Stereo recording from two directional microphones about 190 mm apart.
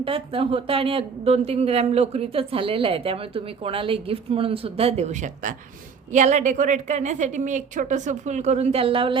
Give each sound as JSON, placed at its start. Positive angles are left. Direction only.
{"t": 0.0, "sound": "a woman's voice", "side_deg": -30}